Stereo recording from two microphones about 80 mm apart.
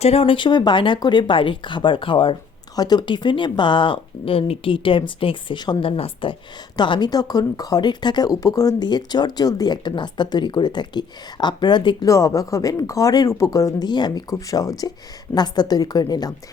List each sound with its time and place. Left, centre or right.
0.3 s speech: left
0.9 s a woman's voice: left
2.7 s a woman's voice: left
7.1 s speech: left
12.0 s speech: left
13.8 s speech: left
14.3 s speech: left